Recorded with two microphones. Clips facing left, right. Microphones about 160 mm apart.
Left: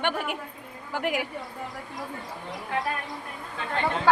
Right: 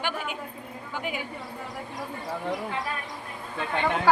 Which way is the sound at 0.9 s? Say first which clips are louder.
Left 5 dB; 80° left.